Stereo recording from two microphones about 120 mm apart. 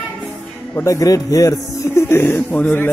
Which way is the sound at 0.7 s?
25° left (ahead or behind).